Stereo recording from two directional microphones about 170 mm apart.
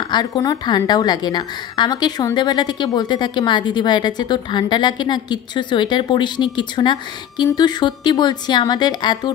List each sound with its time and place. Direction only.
0.1 s a woman's voice: 25° left (ahead or behind)